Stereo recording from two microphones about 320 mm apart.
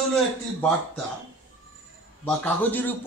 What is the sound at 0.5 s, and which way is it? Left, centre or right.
Speech, centre.